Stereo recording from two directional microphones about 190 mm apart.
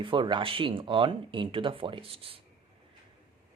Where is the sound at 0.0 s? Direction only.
25° right (ahead or behind).